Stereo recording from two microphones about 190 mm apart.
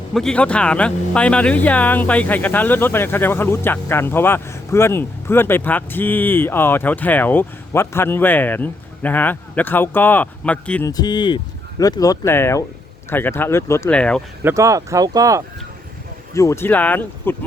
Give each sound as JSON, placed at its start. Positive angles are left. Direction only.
{"t": 0.1, "sound": "speech", "side_deg": 5}
{"t": 10.8, "sound": "speech", "side_deg": 20}
{"t": 14.4, "sound": "speech", "side_deg": -15}
{"t": 16.3, "sound": "speech", "side_deg": 15}